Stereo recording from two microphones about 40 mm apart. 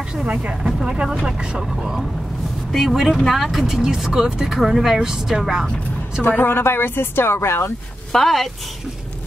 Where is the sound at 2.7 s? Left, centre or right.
Centre.